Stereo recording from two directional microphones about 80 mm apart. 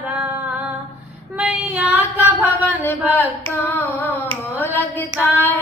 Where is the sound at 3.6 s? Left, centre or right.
Left.